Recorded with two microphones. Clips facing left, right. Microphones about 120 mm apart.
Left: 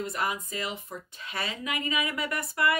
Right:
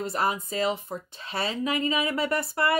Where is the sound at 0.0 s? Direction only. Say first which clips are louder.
Right 4 dB; 35° right (ahead or behind).